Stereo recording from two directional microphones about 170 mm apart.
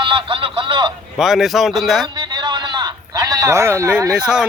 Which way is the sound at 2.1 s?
25° right (ahead or behind).